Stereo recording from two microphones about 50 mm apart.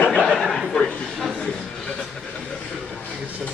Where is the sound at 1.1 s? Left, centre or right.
Centre.